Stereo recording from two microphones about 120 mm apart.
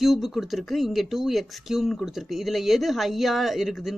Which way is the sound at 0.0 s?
Centre (ahead or behind).